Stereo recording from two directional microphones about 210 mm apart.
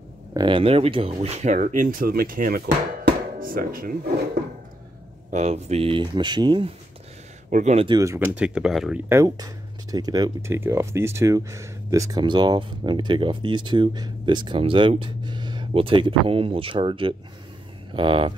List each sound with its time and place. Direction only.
0.3 s speech: 20° right (ahead or behind); by 4.1 s 45° right (ahead or behind)
5.3 s speech: 30° right (ahead or behind)
7.4 s speech: 35° right (ahead or behind)
8.0 s speech: 10° right (ahead or behind)
9.1 s speech: 15° right (ahead or behind)